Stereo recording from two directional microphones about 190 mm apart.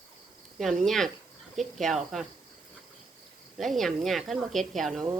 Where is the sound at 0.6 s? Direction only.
5° left (ahead or behind).